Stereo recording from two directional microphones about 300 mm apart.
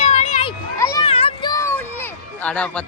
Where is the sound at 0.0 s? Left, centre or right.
Left.